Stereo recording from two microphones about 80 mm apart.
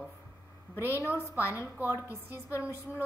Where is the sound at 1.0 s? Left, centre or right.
Right.